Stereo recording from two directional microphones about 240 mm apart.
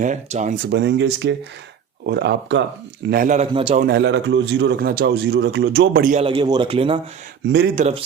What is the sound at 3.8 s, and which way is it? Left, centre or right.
A man's voice, right.